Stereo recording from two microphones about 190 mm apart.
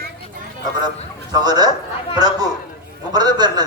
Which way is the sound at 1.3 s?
20° right (ahead or behind).